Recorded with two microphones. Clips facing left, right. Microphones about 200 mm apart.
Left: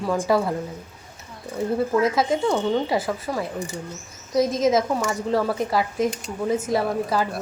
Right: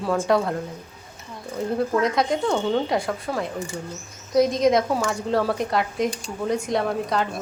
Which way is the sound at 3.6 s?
20° left (ahead or behind).